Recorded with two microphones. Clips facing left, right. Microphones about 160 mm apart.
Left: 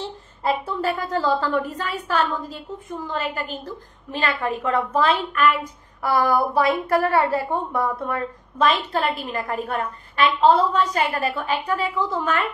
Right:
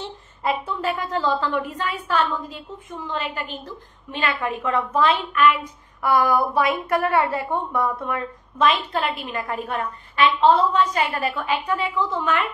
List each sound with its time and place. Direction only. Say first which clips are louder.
0.0 s a woman's voice: left 1 dB; 35° left (ahead or behind)